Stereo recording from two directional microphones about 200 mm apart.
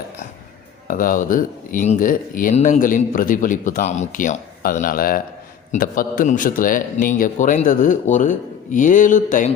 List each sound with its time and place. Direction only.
0.9 s speech: 45° left (ahead or behind)